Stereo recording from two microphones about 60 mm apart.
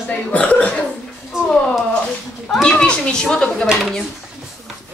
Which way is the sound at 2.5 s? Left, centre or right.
Centre.